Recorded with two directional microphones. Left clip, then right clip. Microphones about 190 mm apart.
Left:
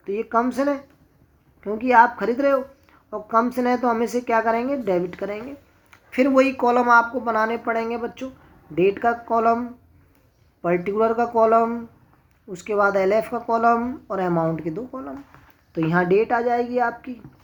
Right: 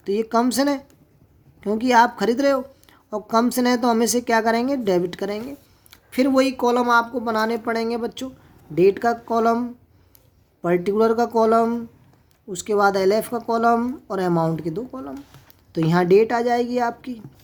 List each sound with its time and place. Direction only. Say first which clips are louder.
0.0 s a woman's voice: right 2 dB; 60° right (ahead or behind); by 3.7 s 90° right
3.7 s a woman's voice: right 2 dB; 55° right (ahead or behind)
15.7 s a woman's voice: right 3 dB; 60° right (ahead or behind)